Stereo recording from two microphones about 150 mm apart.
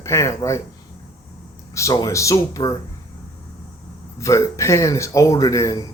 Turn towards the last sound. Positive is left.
turn(degrees=20)  # may be behind; listen again after turning